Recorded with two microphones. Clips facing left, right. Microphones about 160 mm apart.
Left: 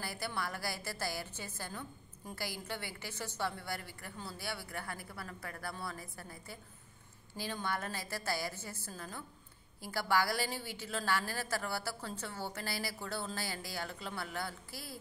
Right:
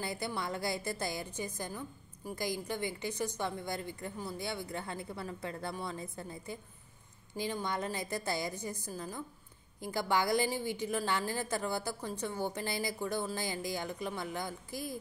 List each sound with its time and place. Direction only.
0.0 s a woman's voice: 20° right (ahead or behind)